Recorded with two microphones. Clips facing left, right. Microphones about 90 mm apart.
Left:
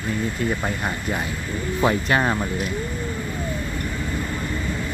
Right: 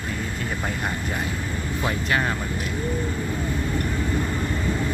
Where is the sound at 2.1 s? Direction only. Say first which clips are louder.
Left 3 dB; 30° left (ahead or behind).